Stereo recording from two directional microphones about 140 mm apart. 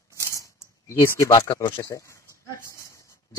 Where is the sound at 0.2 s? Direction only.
20° left (ahead or behind).